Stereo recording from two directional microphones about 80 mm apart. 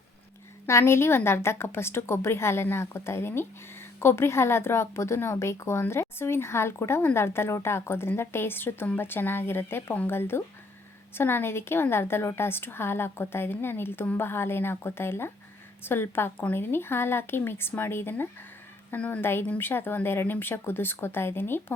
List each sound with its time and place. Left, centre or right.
0.7 s a woman's voice: left